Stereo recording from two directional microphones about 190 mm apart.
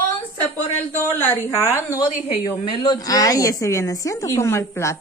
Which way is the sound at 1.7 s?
15° left (ahead or behind).